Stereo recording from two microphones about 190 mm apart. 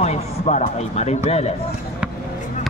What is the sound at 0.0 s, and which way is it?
A man's voice, 35° left (ahead or behind).